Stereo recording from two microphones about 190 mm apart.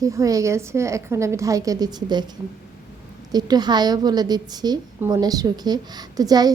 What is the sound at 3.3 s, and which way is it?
A woman's voice, 20° right (ahead or behind).